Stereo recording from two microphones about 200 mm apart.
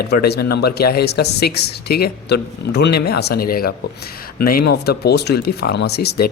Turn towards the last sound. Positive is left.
turn(degrees=55)  # may be behind; listen again after turning